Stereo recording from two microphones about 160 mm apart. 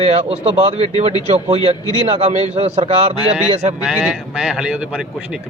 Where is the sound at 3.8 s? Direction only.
5° right (ahead or behind).